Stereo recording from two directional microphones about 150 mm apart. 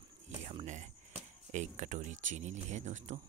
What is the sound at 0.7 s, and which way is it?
Speech, 50° right (ahead or behind).